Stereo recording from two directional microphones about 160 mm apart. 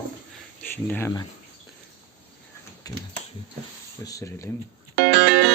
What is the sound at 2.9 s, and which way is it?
Finger snapping, 25° left (ahead or behind).